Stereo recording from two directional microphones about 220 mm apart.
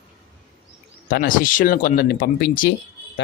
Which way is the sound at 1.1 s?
40° left (ahead or behind).